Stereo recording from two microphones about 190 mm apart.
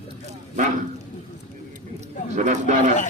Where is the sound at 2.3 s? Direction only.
40° right (ahead or behind).